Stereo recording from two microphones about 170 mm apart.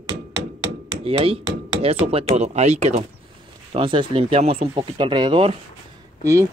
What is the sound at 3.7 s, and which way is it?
Speech, 30° right (ahead or behind).